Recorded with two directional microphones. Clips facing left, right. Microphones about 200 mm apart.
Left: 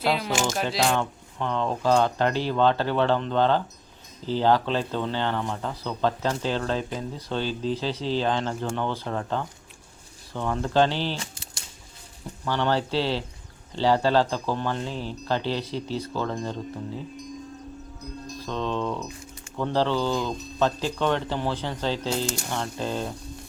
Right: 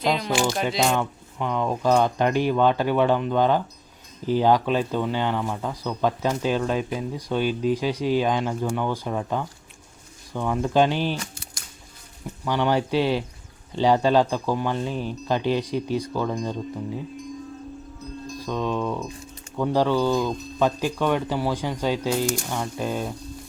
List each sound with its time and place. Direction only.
0.0 s speech: 5° left (ahead or behind)
0.9 s speech: 10° right (ahead or behind)
11.2 s typewriter: 25° left (ahead or behind)
12.5 s speech: 15° right (ahead or behind)
18.3 s speech: 10° right (ahead or behind)